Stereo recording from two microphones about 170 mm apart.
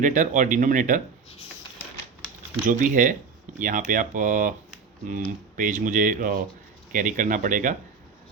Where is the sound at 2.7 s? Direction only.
50° right (ahead or behind).